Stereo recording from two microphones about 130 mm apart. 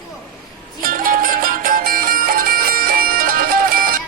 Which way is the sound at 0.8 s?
90° right.